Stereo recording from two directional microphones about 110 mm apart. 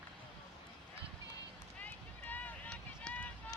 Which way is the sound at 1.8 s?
15° left (ahead or behind).